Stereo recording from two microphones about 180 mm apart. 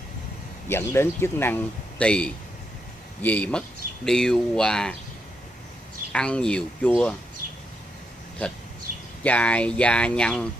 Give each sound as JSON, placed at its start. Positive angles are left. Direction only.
{"t": 0.7, "sound": "speech", "side_deg": 15}
{"t": 6.1, "sound": "speech", "side_deg": 5}
{"t": 8.9, "sound": "a sound", "side_deg": -50}
{"t": 9.2, "sound": "speech", "side_deg": 5}